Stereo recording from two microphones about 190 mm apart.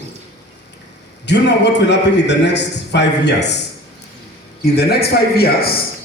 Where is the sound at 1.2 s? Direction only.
65° left (ahead or behind).